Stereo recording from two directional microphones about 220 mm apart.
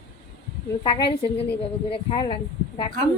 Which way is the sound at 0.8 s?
20° left (ahead or behind).